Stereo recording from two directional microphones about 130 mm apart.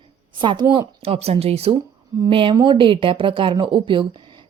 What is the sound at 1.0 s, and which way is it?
A woman's voice, 50° right (ahead or behind).